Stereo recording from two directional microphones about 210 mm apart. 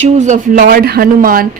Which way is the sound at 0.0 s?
35° right (ahead or behind).